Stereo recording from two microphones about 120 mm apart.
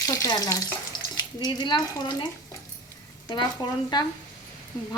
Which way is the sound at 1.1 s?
35° left (ahead or behind).